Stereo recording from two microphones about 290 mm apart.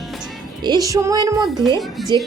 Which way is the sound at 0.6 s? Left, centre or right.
Centre.